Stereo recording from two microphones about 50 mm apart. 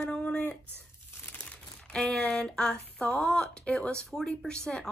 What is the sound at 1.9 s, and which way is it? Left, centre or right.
Speech, centre.